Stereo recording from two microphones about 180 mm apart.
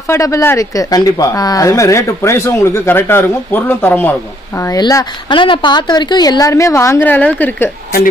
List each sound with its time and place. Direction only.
0.1 s speech: 15° left (ahead or behind)